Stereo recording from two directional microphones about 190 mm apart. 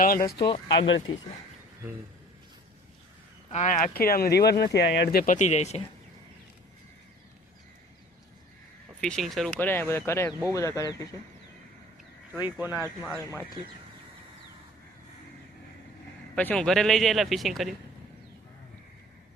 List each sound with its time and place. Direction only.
0.3 s speech: 25° left (ahead or behind)
0.9 s speech: 80° left
3.5 s speech: 40° left (ahead or behind)
9.0 s speech: 5° left (ahead or behind)
12.3 s speech: 10° right (ahead or behind)
16.3 s a man's voice: 5° left (ahead or behind)